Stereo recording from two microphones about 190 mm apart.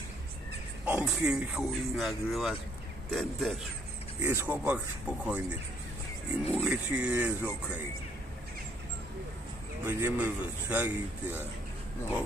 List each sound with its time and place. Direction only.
0.8 s speech: 10° right (ahead or behind)
4.2 s a man's voice: 10° right (ahead or behind)
6.5 s a man's voice: 5° right (ahead or behind)
9.8 s a man's voice: 10° right (ahead or behind)